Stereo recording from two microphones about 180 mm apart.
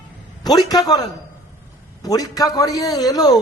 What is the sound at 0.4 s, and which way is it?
A man's voice, 20° left (ahead or behind).